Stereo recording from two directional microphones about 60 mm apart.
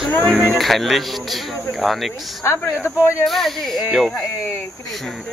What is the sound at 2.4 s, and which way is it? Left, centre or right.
Speech, left.